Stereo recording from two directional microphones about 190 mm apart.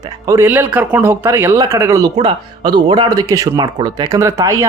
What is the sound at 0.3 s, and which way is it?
Speech, 10° right (ahead or behind).